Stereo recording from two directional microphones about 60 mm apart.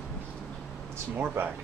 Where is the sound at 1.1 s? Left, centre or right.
Right.